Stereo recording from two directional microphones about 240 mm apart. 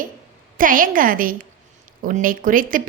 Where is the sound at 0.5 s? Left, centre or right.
Right.